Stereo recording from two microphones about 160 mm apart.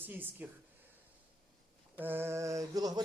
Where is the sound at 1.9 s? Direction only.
10° right (ahead or behind).